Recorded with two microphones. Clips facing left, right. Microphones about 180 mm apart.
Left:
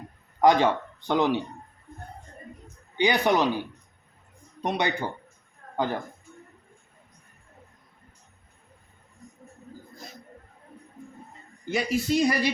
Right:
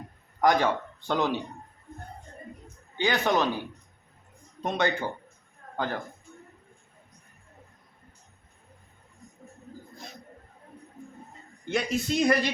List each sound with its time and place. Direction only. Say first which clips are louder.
0.4 s speech: left 3 dB; 20° left (ahead or behind)
3.0 s speech: left 3 dB; 15° left (ahead or behind)
4.6 s a man's voice: even; 15° left (ahead or behind)
11.7 s speech: left 3 dB; 5° left (ahead or behind)